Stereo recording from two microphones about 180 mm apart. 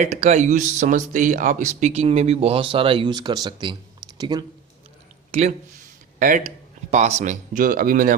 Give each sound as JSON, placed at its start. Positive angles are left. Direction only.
{"t": 0.0, "sound": "speech", "side_deg": -40}
{"t": 5.3, "sound": "speech", "side_deg": -40}